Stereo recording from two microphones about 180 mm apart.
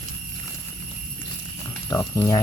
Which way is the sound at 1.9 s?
15° left (ahead or behind).